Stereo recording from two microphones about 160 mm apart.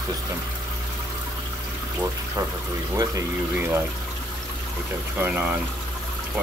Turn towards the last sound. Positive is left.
turn(degrees=-10)  # may be behind; listen again after turning